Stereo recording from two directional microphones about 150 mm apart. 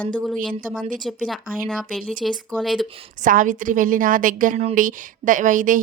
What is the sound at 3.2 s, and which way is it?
A woman's voice, 60° right (ahead or behind).